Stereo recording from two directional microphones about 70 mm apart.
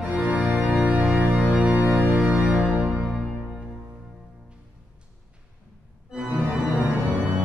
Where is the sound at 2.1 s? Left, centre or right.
Centre.